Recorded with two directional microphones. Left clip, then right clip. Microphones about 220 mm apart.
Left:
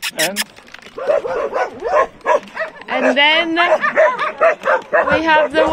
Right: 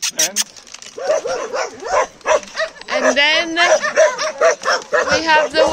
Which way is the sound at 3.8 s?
65° right (ahead or behind).